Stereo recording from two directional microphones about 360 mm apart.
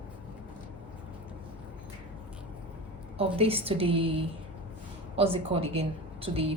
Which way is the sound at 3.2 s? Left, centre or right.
Centre.